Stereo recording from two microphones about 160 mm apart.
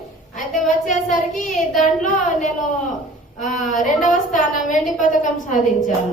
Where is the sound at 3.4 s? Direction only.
50° left (ahead or behind).